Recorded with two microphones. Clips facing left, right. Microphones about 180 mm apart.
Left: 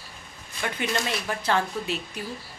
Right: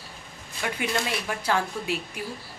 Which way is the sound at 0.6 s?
5° right (ahead or behind).